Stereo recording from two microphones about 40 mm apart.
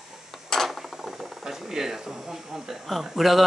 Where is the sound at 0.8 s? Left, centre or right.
Centre.